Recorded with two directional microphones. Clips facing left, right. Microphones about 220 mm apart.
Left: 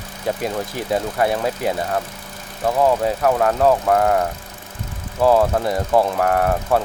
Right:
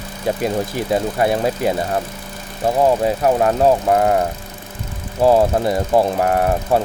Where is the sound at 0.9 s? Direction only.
25° right (ahead or behind).